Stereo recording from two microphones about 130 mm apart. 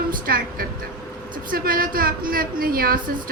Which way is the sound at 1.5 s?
90° right.